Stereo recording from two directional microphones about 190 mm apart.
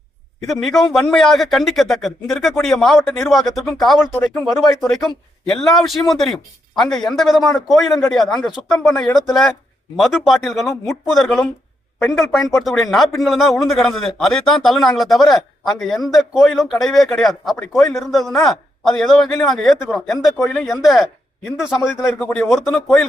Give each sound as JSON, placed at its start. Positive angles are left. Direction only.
{"t": 0.4, "sound": "a man's voice", "side_deg": 0}